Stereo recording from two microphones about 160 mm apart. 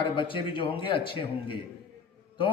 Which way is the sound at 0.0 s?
30° left (ahead or behind).